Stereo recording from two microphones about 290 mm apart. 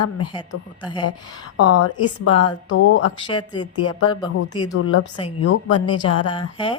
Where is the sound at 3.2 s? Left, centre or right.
Centre.